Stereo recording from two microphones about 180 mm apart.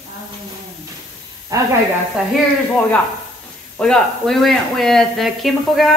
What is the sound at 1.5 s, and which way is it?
Snake, 20° right (ahead or behind).